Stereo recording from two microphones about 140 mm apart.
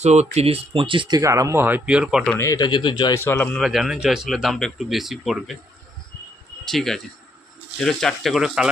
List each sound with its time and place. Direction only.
0.0 s speech: 55° right (ahead or behind); by 2.2 s 5° right (ahead or behind)
2.4 s speech: 25° left (ahead or behind)
3.2 s speech: 15° left (ahead or behind)
3.6 s speech: centre (ahead or behind)
6.7 s speech: centre (ahead or behind)